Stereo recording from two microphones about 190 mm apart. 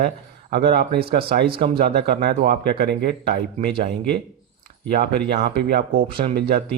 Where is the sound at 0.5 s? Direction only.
55° right (ahead or behind).